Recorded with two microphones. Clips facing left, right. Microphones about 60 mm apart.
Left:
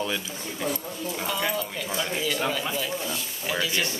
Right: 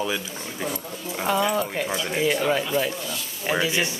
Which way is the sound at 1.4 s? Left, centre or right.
Right.